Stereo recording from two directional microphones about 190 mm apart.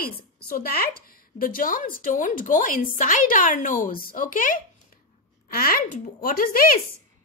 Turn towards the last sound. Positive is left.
turn(degrees=50)  # may be behind; listen again after turning